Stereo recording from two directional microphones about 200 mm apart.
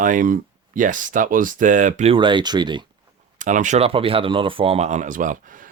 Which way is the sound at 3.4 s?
40° right (ahead or behind).